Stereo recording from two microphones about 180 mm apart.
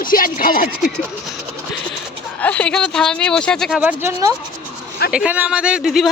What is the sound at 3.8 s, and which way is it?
Speech, 10° right (ahead or behind).